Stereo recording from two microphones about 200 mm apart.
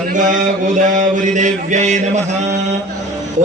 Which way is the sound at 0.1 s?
40° right (ahead or behind).